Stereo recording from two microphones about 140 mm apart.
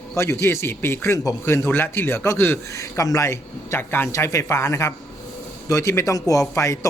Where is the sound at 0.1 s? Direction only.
20° left (ahead or behind).